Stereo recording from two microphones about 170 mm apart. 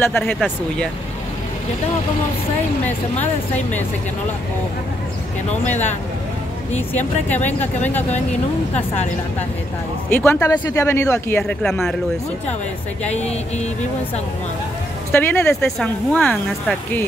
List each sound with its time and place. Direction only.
0.0 s speech: 15° left (ahead or behind)
6.9 s speech: 10° left (ahead or behind)
10.0 s speech: 10° left (ahead or behind)
11.6 s speech: centre (ahead or behind)
13.1 s speech: 40° left (ahead or behind)
15.1 s speech: 15° left (ahead or behind)